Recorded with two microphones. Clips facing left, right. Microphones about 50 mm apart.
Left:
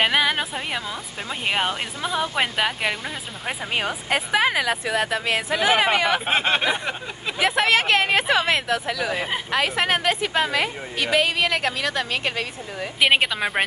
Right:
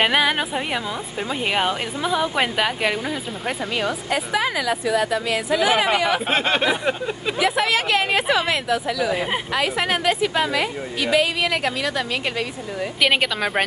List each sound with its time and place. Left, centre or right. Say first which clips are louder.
0.0 s a woman's voice: right 2 dB; centre
4.1 s a woman's voice: left 4 dB; left
6.2 s a woman's voice: right 1 dB; centre
7.3 s a woman's voice: left 1 dB; left
13.0 s a woman's voice: left 1 dB; centre